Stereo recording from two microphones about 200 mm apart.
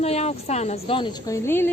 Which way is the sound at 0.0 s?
30° left (ahead or behind).